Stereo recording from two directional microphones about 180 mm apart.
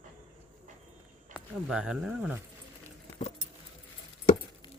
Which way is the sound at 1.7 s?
5° right (ahead or behind).